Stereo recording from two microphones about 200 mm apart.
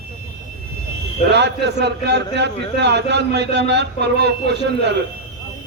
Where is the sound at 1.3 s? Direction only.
60° right (ahead or behind).